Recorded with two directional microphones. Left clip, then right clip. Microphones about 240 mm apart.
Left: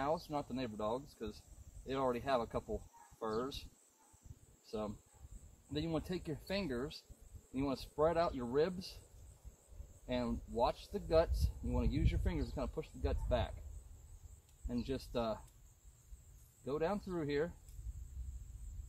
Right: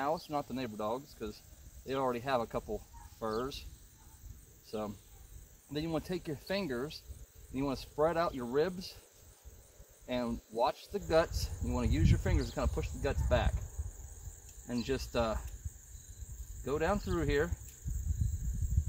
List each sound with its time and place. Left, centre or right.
0.3 s speech: right
4.6 s speech: right
10.0 s speech: right
14.7 s speech: right
16.6 s speech: centre